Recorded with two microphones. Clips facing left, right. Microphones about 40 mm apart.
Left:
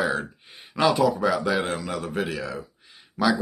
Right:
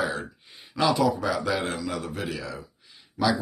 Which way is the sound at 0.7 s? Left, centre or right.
Left.